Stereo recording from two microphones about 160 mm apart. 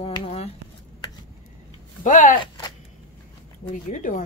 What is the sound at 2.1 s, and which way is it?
Speech, 55° left (ahead or behind).